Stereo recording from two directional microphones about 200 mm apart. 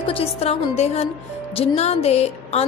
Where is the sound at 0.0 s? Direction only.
30° left (ahead or behind).